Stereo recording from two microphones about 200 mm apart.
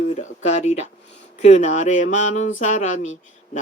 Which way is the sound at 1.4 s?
35° left (ahead or behind).